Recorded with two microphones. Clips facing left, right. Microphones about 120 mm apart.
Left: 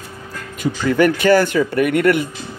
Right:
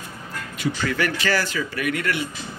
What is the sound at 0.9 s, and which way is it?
Speech, 50° left (ahead or behind).